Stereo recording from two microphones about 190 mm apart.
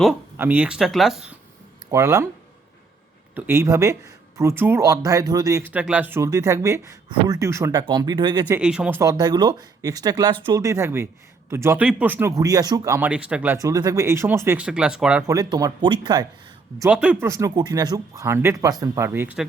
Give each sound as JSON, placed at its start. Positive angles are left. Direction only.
{"t": 0.0, "sound": "speech", "side_deg": -5}
{"t": 1.9, "sound": "speech", "side_deg": -15}
{"t": 3.3, "sound": "speech", "side_deg": -10}
{"t": 8.4, "sound": "speech", "side_deg": -5}
{"t": 9.0, "sound": "speech", "side_deg": -20}
{"t": 15.3, "sound": "speech", "side_deg": -20}
{"t": 16.8, "sound": "speech", "side_deg": -5}